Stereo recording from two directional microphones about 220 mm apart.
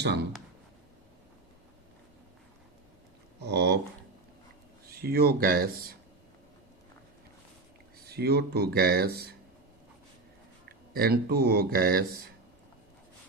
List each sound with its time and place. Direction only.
3.4 s speech: 50° right (ahead or behind)
4.9 s speech: 45° right (ahead or behind)
8.0 s speech: 45° right (ahead or behind)
10.7 s speech: 45° right (ahead or behind)